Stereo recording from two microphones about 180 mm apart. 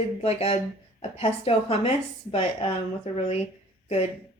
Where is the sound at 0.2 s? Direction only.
35° left (ahead or behind).